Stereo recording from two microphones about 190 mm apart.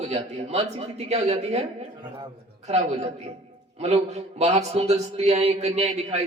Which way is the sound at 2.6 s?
35° right (ahead or behind).